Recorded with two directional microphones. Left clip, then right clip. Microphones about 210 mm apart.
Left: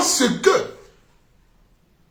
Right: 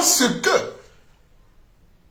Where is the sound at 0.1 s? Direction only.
15° right (ahead or behind).